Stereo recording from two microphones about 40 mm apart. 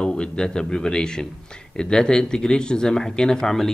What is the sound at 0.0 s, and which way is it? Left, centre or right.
A man's voice, left.